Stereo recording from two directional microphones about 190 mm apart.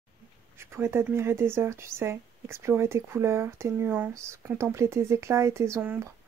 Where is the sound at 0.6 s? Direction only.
15° right (ahead or behind).